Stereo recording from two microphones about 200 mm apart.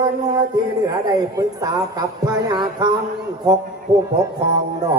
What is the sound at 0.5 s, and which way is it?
A man's voice, 20° right (ahead or behind).